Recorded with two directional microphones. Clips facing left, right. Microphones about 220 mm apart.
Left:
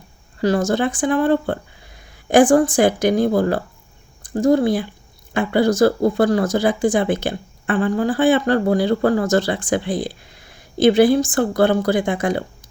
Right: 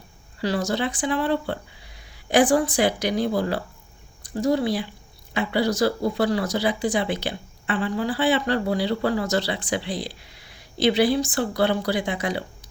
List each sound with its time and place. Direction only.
0.3 s speech: 50° left (ahead or behind)